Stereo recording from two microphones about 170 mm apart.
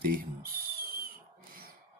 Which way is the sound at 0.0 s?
60° right (ahead or behind).